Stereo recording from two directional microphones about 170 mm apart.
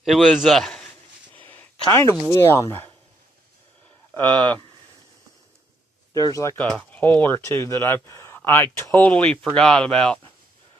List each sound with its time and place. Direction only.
0.0 s a man's voice: centre (ahead or behind); by 2.9 s 15° left (ahead or behind)
4.1 s speech: 10° left (ahead or behind)
6.1 s speech: 20° left (ahead or behind); by 10.2 s 5° left (ahead or behind)